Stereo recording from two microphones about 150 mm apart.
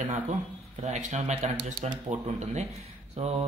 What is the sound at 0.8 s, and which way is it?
Speech, 50° right (ahead or behind).